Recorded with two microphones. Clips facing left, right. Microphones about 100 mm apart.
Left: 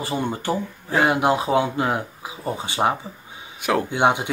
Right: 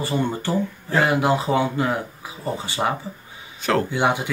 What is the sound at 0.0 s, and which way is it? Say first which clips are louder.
Speech: right 1 dB; 15° left (ahead or behind).